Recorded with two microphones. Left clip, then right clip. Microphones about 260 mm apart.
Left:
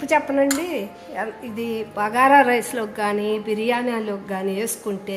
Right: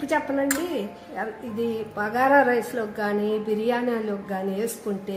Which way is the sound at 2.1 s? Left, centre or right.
Left.